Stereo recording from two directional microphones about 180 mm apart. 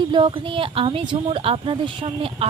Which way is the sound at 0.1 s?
25° right (ahead or behind).